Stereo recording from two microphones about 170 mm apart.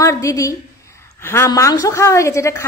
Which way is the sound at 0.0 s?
20° left (ahead or behind).